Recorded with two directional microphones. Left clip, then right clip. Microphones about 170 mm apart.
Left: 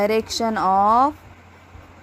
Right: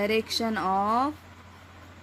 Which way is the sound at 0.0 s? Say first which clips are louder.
Left 6 dB; 20° left (ahead or behind).